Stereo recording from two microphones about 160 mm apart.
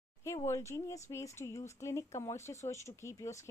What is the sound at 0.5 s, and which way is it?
Speech, 20° left (ahead or behind).